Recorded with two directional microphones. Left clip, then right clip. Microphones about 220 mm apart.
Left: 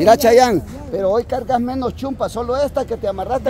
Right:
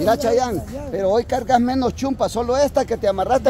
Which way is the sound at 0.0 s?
40° left (ahead or behind).